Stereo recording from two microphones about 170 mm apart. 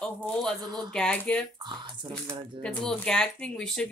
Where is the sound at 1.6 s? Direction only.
25° right (ahead or behind).